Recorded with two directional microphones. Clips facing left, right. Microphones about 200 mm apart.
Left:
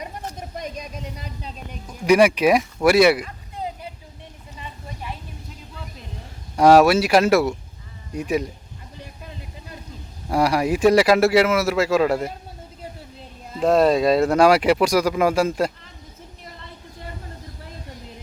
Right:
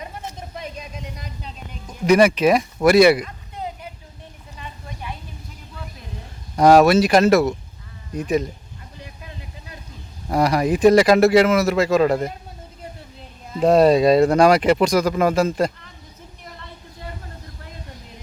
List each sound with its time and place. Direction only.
0.3 s a sound: 40° left (ahead or behind)
2.0 s speech: 10° left (ahead or behind)
6.6 s speech: 5° left (ahead or behind)
10.2 s speech: 10° left (ahead or behind)
13.6 s speech: centre (ahead or behind)